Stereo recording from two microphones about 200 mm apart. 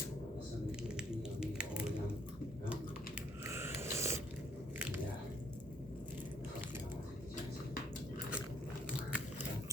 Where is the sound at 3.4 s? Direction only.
15° right (ahead or behind).